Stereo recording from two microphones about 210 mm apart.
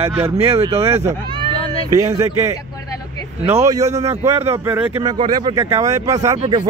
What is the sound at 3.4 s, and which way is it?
Speech, 15° right (ahead or behind).